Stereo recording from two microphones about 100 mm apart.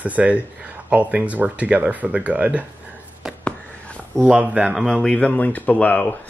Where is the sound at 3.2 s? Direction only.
5° right (ahead or behind).